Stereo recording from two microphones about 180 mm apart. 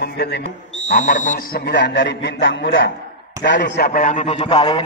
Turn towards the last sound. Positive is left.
turn(degrees=30)  # may be behind; listen again after turning